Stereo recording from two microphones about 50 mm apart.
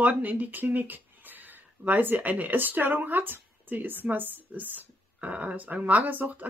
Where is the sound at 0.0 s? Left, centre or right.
Right.